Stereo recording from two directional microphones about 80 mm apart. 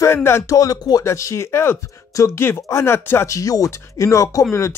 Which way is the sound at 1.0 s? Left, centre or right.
Left.